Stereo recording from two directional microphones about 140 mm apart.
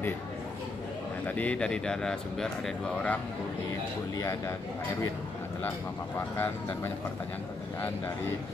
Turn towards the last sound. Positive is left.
turn(degrees=15)  # may be behind; listen again after turning